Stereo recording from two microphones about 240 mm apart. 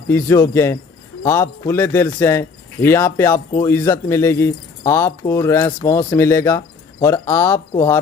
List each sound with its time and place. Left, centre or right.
0.1 s speech: centre